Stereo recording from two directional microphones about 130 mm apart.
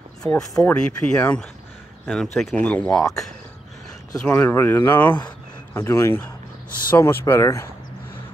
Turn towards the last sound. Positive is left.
turn(degrees=20)  # may be behind; listen again after turning